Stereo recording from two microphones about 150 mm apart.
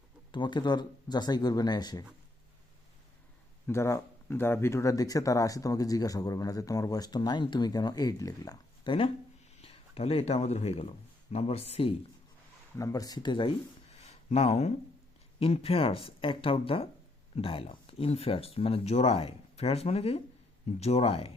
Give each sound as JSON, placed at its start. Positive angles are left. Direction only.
{"t": 0.3, "sound": "speech", "side_deg": 30}
{"t": 3.7, "sound": "speech", "side_deg": 20}
{"t": 9.6, "sound": "speech", "side_deg": 40}
{"t": 12.7, "sound": "speech", "side_deg": 25}
{"t": 14.0, "sound": "a sound", "side_deg": 45}
{"t": 15.4, "sound": "speech", "side_deg": 40}